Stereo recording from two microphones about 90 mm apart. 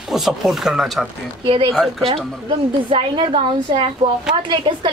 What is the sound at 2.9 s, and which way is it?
A woman's voice, 80° right.